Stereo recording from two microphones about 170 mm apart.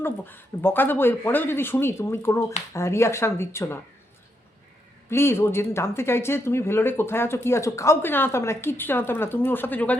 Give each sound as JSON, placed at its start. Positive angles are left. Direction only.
{"t": 0.0, "sound": "speech", "side_deg": 10}
{"t": 5.0, "sound": "speech", "side_deg": 15}